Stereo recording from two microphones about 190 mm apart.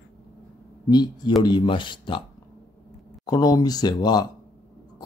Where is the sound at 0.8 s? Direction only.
20° left (ahead or behind).